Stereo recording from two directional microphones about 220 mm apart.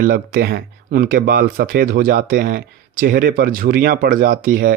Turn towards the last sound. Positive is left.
turn(degrees=-40)  # may be behind; listen again after turning